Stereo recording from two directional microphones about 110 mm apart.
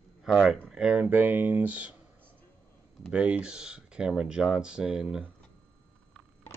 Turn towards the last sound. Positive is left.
turn(degrees=-5)  # may be behind; listen again after turning